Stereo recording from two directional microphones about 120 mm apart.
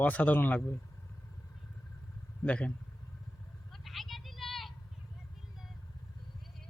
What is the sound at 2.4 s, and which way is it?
Speech, 10° left (ahead or behind).